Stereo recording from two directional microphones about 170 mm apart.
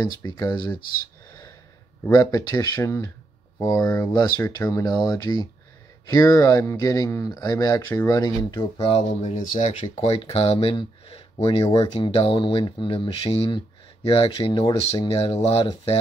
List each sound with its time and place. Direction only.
0.0 s speech: 20° left (ahead or behind)
2.0 s speech: 20° left (ahead or behind); by 16.0 s 35° left (ahead or behind)